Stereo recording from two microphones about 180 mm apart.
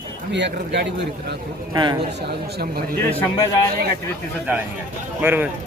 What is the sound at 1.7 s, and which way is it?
Speech, 25° right (ahead or behind).